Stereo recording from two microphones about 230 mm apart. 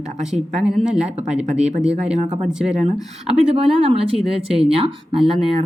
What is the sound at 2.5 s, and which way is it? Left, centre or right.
Speech, centre.